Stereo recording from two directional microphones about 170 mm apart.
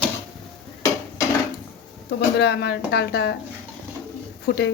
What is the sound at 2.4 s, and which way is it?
Speech, 75° left (ahead or behind).